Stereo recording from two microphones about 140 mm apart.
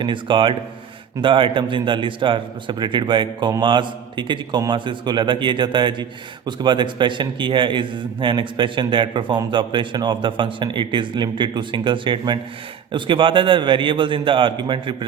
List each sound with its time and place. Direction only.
0.0 s a man's voice: 35° right (ahead or behind)